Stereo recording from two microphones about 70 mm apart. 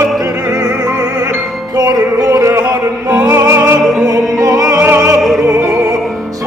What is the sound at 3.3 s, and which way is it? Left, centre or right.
Music, right.